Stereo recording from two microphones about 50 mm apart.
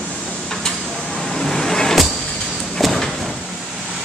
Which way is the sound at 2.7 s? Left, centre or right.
Centre.